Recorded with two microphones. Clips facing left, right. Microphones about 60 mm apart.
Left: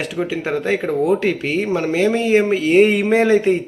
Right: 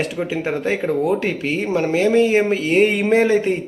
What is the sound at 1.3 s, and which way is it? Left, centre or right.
Speech, centre.